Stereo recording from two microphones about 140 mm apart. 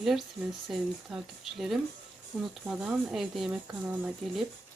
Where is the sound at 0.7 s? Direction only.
Centre (ahead or behind).